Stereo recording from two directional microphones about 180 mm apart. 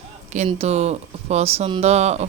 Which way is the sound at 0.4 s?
35° right (ahead or behind).